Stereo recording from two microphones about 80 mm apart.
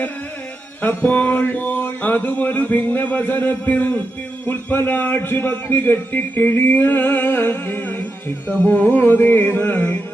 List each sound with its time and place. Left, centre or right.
0.8 s a man's voice: left